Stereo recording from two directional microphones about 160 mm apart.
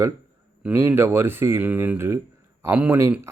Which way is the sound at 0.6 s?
15° right (ahead or behind).